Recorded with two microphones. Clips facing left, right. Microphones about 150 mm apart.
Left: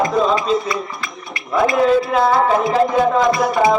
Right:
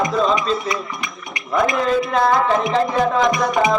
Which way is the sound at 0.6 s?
20° right (ahead or behind).